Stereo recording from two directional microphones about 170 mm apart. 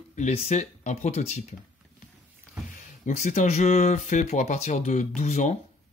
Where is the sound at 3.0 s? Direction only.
45° left (ahead or behind).